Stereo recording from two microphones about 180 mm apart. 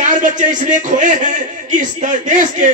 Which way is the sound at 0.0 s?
45° right (ahead or behind).